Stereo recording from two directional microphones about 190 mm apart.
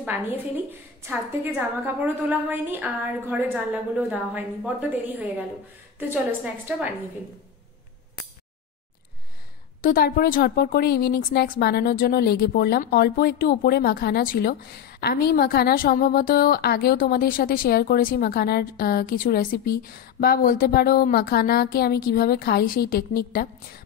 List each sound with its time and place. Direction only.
0.0 s a woman's voice: 10° right (ahead or behind)
9.8 s a woman's voice: 50° left (ahead or behind)